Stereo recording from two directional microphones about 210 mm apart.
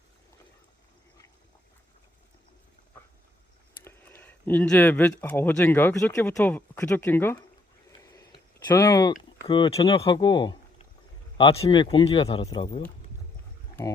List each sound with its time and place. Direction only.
3.8 s speech: 10° left (ahead or behind)
7.9 s a sound: 15° left (ahead or behind)
9.5 s speech: 25° left (ahead or behind)